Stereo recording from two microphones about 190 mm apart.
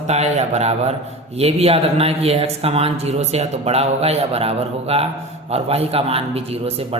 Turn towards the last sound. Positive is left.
turn(degrees=-30)  # may be behind; listen again after turning